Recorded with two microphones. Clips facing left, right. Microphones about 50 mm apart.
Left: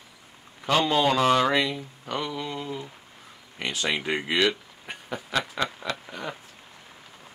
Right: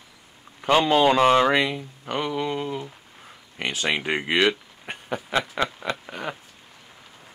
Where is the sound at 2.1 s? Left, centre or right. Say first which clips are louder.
Right 5 dB; right.